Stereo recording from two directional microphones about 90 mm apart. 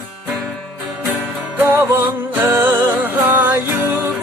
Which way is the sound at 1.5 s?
25° right (ahead or behind).